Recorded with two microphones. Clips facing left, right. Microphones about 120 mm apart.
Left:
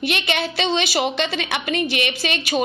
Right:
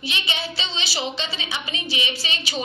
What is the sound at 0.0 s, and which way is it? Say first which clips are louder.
A woman's voice: left 7 dB; 60° left (ahead or behind).